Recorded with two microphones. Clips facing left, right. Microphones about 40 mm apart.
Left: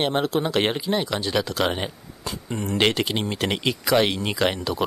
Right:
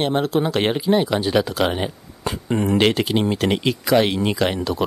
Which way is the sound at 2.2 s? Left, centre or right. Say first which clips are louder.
Right 8 dB; right.